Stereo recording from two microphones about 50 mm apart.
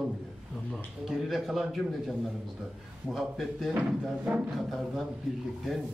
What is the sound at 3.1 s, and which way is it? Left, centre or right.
Speech, centre.